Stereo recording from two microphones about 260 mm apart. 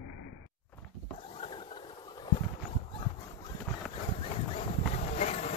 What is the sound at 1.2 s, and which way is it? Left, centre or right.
Boat, centre.